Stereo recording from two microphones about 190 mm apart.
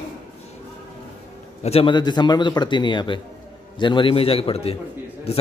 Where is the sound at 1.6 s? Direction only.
30° left (ahead or behind).